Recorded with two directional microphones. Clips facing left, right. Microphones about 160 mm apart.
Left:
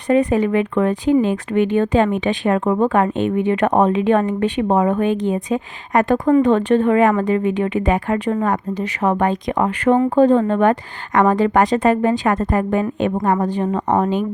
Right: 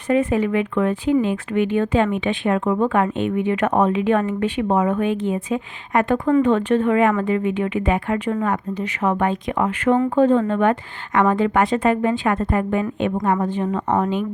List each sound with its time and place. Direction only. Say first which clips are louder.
0.1 s speech: left 3 dB; 35° left (ahead or behind)